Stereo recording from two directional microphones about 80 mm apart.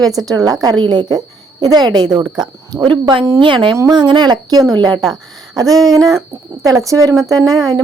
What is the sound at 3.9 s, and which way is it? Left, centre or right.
A woman's voice, right.